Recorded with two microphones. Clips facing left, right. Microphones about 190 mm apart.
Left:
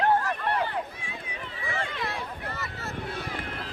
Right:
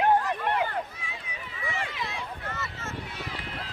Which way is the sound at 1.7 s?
55° left (ahead or behind).